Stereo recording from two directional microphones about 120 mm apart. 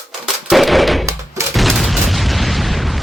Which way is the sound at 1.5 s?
Centre (ahead or behind).